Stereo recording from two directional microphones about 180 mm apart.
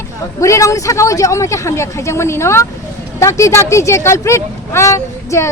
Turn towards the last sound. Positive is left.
turn(degrees=15)  # may be behind; listen again after turning